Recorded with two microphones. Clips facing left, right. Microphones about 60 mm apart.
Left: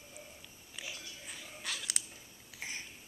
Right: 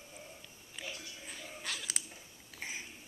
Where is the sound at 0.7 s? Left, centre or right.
Centre.